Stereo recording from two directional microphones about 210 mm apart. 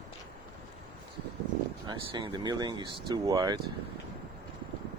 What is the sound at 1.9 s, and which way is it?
Speech, 20° right (ahead or behind).